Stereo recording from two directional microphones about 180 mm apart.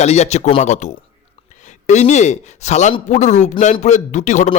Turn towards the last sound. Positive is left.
turn(degrees=40)  # may be behind; listen again after turning